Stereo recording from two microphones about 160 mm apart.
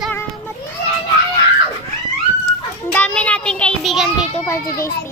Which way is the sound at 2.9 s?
10° left (ahead or behind).